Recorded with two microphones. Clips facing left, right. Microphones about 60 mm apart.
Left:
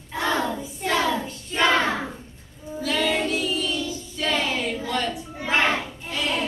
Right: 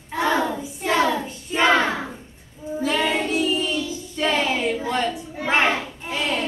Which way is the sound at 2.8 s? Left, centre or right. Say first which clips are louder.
Right 1 dB; right.